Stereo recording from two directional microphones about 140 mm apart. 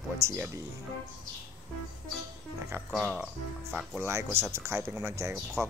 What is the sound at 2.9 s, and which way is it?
Speech, centre (ahead or behind).